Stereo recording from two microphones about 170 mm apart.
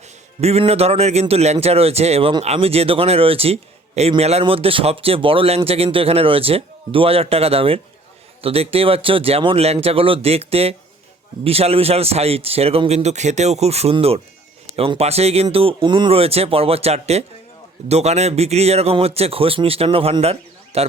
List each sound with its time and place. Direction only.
0.4 s a man's voice: 35° right (ahead or behind)